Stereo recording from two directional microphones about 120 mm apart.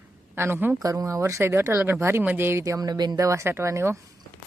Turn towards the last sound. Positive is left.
turn(degrees=-20)  # may be behind; listen again after turning